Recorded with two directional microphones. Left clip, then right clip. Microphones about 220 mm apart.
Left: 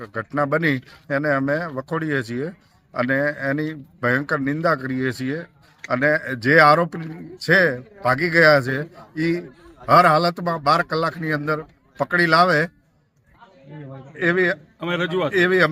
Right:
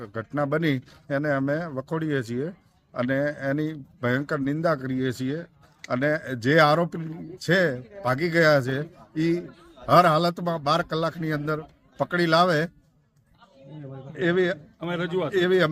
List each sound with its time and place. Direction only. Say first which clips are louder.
0.0 s speech: left 5 dB; 5° right (ahead or behind)
14.2 s speech: left 4 dB; 5° right (ahead or behind)
14.8 s a man's voice: left 4 dB; 40° left (ahead or behind)
15.3 s speech: left 4 dB; 10° right (ahead or behind)